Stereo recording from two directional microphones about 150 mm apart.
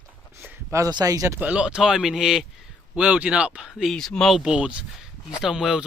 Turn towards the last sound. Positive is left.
turn(degrees=-5)  # may be behind; listen again after turning